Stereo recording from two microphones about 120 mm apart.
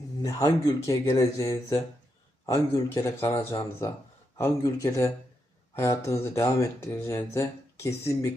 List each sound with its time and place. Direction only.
0.2 s speech: 30° left (ahead or behind)